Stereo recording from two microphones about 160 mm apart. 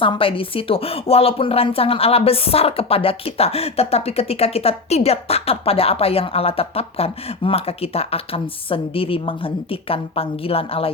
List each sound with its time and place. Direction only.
0.0 s a woman's voice: 35° left (ahead or behind)